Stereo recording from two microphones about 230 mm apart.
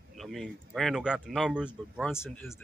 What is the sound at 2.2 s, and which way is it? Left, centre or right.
Speech, centre.